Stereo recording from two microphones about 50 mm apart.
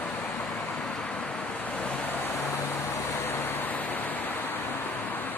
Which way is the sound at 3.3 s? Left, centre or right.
Left.